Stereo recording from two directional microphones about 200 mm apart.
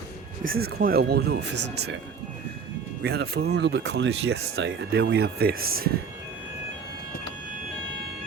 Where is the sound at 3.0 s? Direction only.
55° right (ahead or behind).